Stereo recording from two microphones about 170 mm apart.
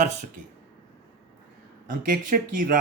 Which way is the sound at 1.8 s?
50° right (ahead or behind).